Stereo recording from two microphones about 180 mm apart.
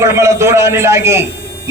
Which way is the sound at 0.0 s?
15° right (ahead or behind).